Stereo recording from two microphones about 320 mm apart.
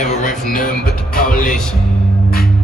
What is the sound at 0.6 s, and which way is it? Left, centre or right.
Music, left.